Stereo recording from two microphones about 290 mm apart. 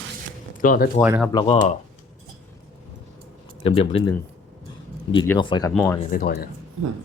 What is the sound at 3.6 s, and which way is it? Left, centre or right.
Speech, centre.